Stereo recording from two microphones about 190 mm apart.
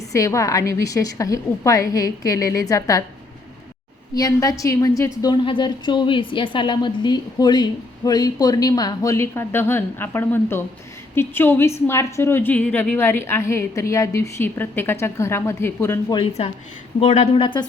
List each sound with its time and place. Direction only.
0.1 s a woman's voice: 15° left (ahead or behind)
4.1 s a woman's voice: 20° left (ahead or behind)
16.4 s a woman's voice: 30° left (ahead or behind)